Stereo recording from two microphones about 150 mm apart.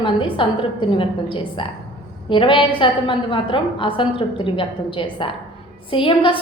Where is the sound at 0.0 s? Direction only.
35° left (ahead or behind).